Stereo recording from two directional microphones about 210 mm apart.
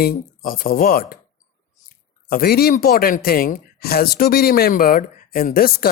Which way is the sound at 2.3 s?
45° left (ahead or behind).